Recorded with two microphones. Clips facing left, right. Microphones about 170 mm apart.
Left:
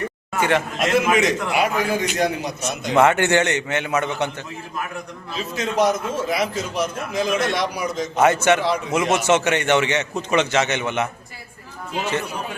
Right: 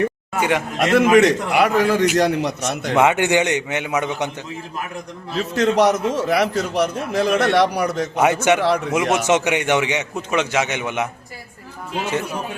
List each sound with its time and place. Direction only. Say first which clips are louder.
0.3 s a man's voice: left 1 dB; 10° right (ahead or behind)
0.8 s a man's voice: right 8 dB; 65° right (ahead or behind)
2.9 s a man's voice: even; 15° right (ahead or behind)
5.3 s a man's voice: right 7 dB; 70° right (ahead or behind)
8.1 s a man's voice: left 1 dB; 10° right (ahead or behind)
8.6 s a man's voice: right 3 dB; 70° right (ahead or behind)
9.1 s a man's voice: left 1 dB; 15° right (ahead or behind)